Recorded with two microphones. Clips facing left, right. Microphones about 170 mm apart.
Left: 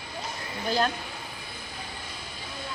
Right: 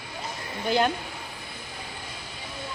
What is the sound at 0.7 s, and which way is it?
Speech, 15° right (ahead or behind).